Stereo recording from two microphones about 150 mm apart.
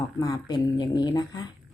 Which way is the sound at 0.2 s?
25° left (ahead or behind).